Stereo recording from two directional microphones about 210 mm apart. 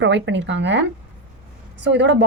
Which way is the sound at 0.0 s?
60° right (ahead or behind).